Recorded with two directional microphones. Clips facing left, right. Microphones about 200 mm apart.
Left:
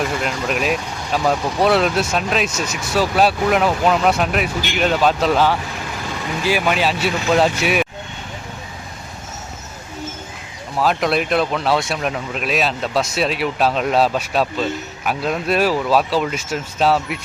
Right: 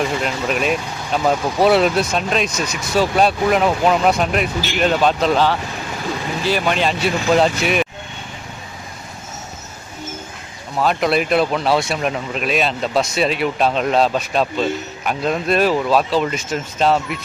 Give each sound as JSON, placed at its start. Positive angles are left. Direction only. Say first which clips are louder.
{"t": 0.0, "sound": "speech", "louder": "right 1 dB", "side_deg": 0}
{"t": 10.8, "sound": "speech", "louder": "right 1 dB", "side_deg": 0}